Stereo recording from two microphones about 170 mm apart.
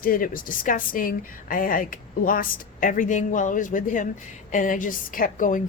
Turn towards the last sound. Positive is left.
turn(degrees=50)  # may be behind; listen again after turning